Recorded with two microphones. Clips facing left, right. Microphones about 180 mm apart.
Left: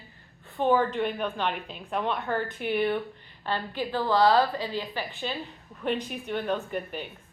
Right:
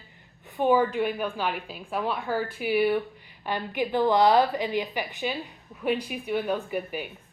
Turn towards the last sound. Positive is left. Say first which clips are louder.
# right 2 dB
turn(degrees=-10)  # may be behind; listen again after turning